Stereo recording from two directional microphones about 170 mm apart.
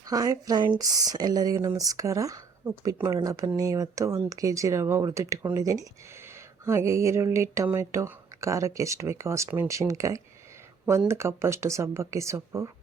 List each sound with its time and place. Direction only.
0.1 s speech: 20° right (ahead or behind)